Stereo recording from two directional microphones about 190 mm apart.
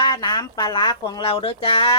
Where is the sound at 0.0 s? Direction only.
20° left (ahead or behind).